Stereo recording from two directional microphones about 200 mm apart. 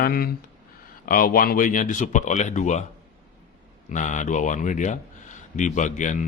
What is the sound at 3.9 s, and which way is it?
Speech, 40° left (ahead or behind).